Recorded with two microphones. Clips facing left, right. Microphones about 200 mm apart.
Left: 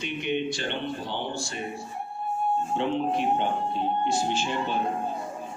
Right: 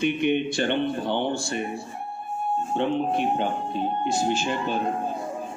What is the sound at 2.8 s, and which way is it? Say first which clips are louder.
Speech: right 4 dB; 55° right (ahead or behind).